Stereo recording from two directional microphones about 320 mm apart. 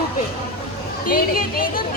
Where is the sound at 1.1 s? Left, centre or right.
Left.